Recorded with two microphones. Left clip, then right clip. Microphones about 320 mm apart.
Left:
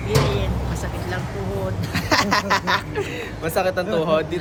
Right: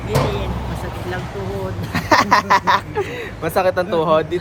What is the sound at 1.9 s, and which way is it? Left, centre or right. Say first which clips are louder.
Speech: right 6 dB; centre.